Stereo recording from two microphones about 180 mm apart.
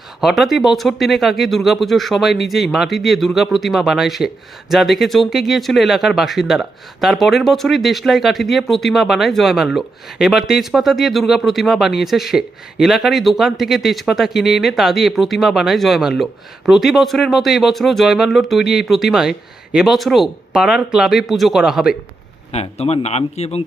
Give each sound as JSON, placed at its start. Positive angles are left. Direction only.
{"t": 0.2, "sound": "speech", "side_deg": 0}
{"t": 22.5, "sound": "speech", "side_deg": 35}